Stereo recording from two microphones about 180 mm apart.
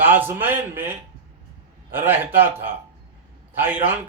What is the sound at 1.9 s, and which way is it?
Speech, 10° right (ahead or behind).